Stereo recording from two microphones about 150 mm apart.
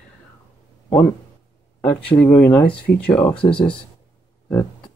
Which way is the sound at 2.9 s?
75° left (ahead or behind).